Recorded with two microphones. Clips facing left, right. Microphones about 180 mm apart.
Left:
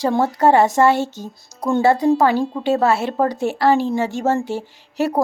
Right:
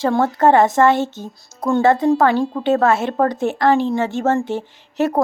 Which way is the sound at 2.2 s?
5° left (ahead or behind).